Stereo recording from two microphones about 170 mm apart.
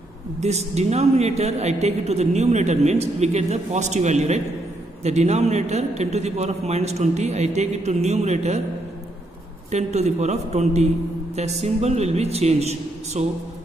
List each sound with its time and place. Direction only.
0.4 s a woman's voice: 40° right (ahead or behind)
9.7 s a woman's voice: 40° right (ahead or behind)